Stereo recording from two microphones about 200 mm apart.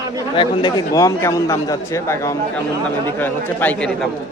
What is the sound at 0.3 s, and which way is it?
A man's voice, 25° left (ahead or behind).